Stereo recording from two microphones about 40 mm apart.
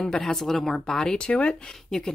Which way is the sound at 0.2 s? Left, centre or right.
Centre.